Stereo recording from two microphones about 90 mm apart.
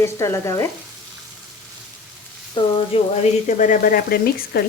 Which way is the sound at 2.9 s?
85° left.